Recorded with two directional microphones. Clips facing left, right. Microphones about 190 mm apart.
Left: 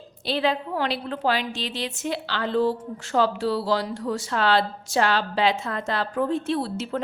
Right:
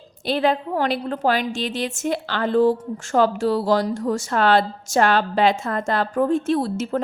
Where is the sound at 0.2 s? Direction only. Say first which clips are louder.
Right 4 dB; 50° right (ahead or behind).